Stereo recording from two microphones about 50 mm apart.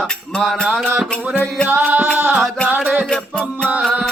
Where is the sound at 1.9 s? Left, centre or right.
Right.